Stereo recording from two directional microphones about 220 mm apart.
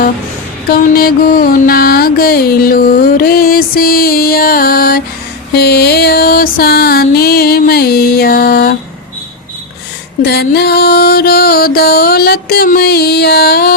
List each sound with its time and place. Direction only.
0.7 s music: 40° left (ahead or behind)
10.2 s music: 45° left (ahead or behind)